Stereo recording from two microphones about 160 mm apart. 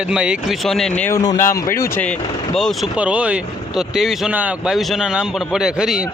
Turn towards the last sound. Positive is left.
turn(degrees=-5)  # may be behind; listen again after turning